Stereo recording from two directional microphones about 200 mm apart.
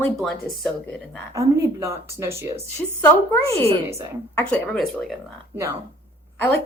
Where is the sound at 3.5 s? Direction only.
30° right (ahead or behind).